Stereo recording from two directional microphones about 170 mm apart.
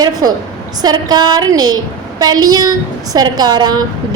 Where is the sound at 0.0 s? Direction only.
20° right (ahead or behind).